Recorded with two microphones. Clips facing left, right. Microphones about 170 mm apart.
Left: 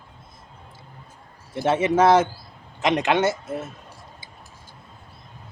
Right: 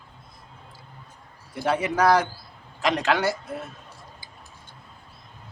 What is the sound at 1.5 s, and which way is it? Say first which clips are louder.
A man's voice: left 4 dB; 25° left (ahead or behind).